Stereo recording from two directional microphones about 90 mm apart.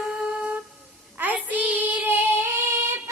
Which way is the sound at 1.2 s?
20° right (ahead or behind).